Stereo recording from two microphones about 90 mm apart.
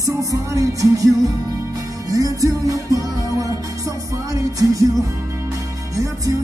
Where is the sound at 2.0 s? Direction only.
40° right (ahead or behind).